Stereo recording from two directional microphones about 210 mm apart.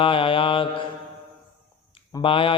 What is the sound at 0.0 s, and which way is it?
Mantra, 25° left (ahead or behind).